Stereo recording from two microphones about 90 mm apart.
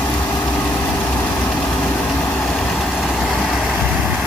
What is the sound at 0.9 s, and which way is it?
Vehicle, 15° left (ahead or behind).